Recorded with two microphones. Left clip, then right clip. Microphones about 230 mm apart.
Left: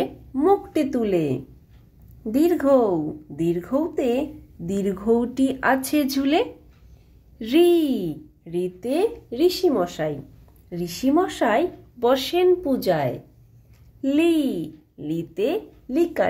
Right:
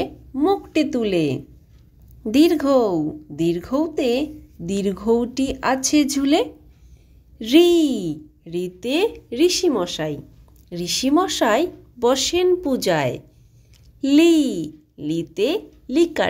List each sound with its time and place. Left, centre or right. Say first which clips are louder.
0.0 s a sound: even; right
1.0 s a woman's voice: right 2 dB; right
10.7 s a woman's voice: right 3 dB; right